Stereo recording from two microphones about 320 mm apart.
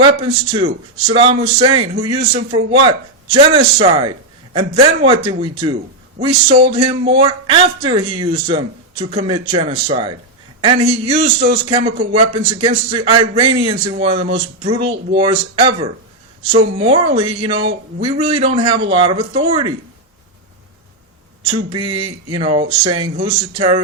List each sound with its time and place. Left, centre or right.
0.0 s speech: centre
21.4 s speech: centre